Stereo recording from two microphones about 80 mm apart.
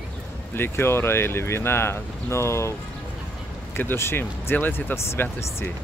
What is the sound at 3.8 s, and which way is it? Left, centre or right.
Speech, left.